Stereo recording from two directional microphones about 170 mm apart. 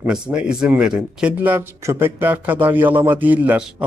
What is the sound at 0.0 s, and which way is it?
Speech, 5° right (ahead or behind).